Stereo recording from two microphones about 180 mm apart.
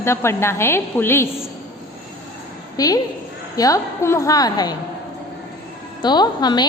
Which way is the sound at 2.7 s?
20° left (ahead or behind).